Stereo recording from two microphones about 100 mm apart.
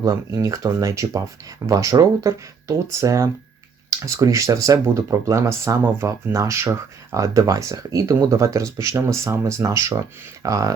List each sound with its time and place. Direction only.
0.0 s speech: 30° right (ahead or behind)